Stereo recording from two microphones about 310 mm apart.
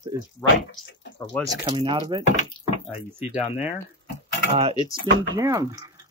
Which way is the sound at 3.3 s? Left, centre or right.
Centre.